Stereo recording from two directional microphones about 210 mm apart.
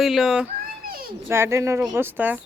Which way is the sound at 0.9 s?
45° right (ahead or behind).